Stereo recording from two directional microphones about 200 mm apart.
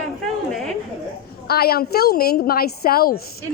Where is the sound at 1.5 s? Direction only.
50° left (ahead or behind).